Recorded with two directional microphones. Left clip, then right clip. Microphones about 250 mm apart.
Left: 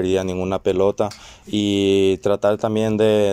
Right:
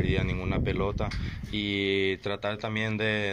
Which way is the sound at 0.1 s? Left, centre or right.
Left.